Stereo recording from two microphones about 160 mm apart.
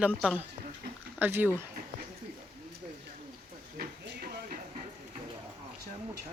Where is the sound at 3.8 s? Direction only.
70° right (ahead or behind).